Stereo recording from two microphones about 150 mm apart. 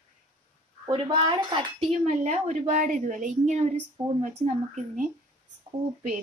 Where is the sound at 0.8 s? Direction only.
30° right (ahead or behind).